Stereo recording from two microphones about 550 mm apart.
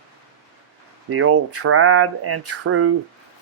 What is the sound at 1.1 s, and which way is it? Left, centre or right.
Speech, right.